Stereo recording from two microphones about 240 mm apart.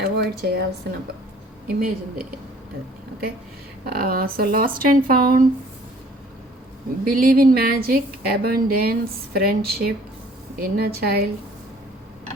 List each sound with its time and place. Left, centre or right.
0.0 s a woman's voice: right
3.8 s a woman's voice: right
7.1 s a woman's voice: right